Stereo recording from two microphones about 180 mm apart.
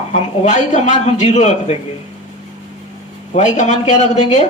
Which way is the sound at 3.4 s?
40° left (ahead or behind).